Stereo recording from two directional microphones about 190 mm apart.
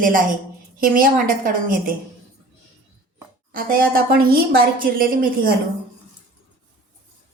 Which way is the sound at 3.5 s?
50° right (ahead or behind).